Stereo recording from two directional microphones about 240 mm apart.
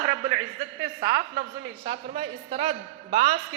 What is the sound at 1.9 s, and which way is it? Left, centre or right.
A woman's voice, right.